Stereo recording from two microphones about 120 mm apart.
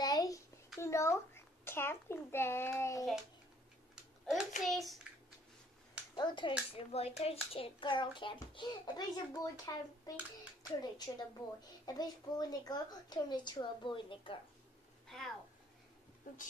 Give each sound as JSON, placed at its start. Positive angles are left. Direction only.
{"t": 0.0, "sound": "a sound", "side_deg": 30}
{"t": 0.7, "sound": "a child's voice", "side_deg": 25}
{"t": 3.9, "sound": "typing", "side_deg": -5}
{"t": 4.6, "sound": "a child's voice", "side_deg": 0}
{"t": 6.1, "sound": "a woman's voice", "side_deg": 40}
{"t": 6.9, "sound": "a child's voice", "side_deg": 60}
{"t": 7.5, "sound": "a woman's voice", "side_deg": 45}
{"t": 15.0, "sound": "a sound", "side_deg": 5}